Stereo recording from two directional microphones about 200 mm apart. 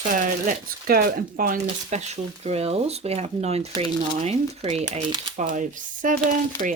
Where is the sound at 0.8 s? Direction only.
45° right (ahead or behind).